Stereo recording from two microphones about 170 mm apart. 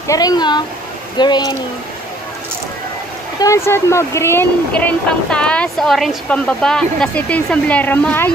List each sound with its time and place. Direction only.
0.0 s speech: 20° left (ahead or behind)
3.3 s speech: 15° left (ahead or behind)